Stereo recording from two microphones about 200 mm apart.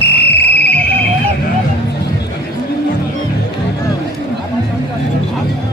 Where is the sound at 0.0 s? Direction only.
55° left (ahead or behind).